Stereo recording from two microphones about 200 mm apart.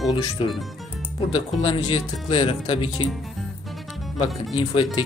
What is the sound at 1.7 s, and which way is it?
Speech, 25° left (ahead or behind).